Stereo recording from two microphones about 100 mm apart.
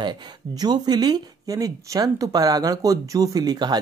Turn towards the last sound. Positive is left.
turn(degrees=-45)  # may be behind; listen again after turning